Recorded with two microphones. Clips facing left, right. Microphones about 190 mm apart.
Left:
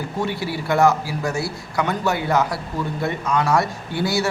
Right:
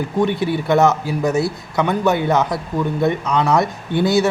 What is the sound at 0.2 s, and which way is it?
Speech, 20° right (ahead or behind).